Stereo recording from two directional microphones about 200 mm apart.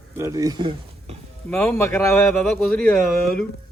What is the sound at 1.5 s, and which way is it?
Speech, 5° left (ahead or behind).